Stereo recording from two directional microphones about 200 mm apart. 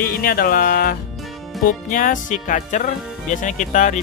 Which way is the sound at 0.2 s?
50° left (ahead or behind).